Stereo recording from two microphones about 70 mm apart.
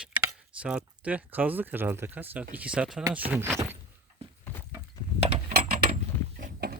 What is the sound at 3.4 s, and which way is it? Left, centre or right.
Speech, right.